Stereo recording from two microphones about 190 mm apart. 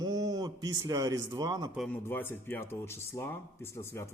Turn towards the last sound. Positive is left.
turn(degrees=15)  # may be behind; listen again after turning